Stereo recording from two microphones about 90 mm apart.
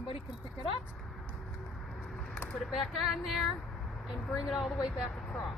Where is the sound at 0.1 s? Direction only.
90° left.